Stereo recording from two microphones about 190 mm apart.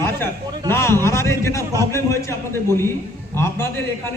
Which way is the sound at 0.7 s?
15° left (ahead or behind).